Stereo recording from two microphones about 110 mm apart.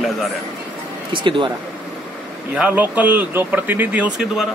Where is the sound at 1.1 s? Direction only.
50° right (ahead or behind).